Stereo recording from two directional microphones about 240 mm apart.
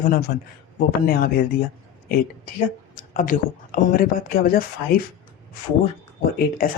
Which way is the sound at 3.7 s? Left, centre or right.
Left.